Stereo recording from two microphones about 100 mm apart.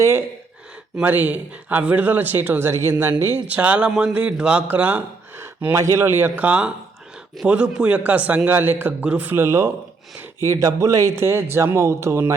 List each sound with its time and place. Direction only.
0.0 s a man's voice: 25° right (ahead or behind)
3.4 s a man's voice: 15° right (ahead or behind)
5.4 s a man's voice: 30° right (ahead or behind)